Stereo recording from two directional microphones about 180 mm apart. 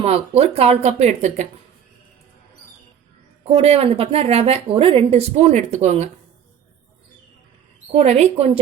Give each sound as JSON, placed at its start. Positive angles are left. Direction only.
{"t": 0.0, "sound": "a woman's voice", "side_deg": -35}
{"t": 3.5, "sound": "a woman's voice", "side_deg": -35}
{"t": 7.9, "sound": "a woman's voice", "side_deg": -35}